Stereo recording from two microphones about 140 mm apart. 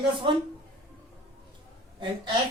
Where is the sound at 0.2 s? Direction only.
35° right (ahead or behind).